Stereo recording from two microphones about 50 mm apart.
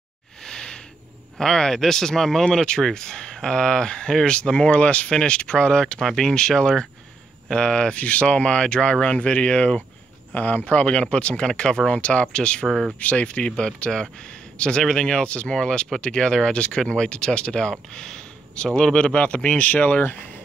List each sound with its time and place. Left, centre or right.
0.4 s a sound: centre
1.4 s speech: centre
5.9 s speech: centre
12.6 s speech: centre
13.0 s speech: left